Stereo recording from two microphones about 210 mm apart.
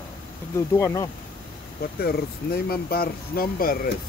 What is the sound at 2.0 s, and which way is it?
Speech, 45° left (ahead or behind).